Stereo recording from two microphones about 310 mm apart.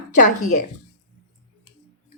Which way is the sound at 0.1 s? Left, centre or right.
Left.